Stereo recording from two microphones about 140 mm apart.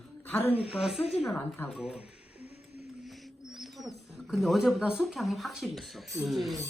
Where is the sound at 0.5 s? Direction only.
45° left (ahead or behind).